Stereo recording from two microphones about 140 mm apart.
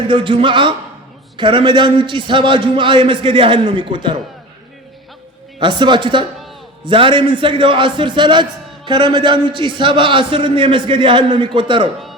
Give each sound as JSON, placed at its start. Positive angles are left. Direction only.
{"t": 0.1, "sound": "a man's voice", "side_deg": -35}
{"t": 5.5, "sound": "a man's voice", "side_deg": -35}